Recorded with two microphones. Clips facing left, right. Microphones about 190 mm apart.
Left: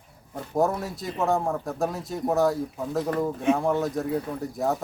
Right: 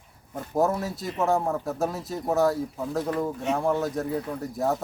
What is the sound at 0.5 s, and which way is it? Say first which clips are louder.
Speech: even; centre (ahead or behind).